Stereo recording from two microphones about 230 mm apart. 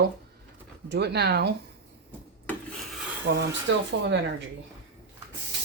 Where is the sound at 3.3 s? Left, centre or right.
Right.